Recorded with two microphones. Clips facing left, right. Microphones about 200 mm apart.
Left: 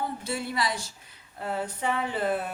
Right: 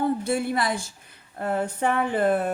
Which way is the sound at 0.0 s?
55° right (ahead or behind).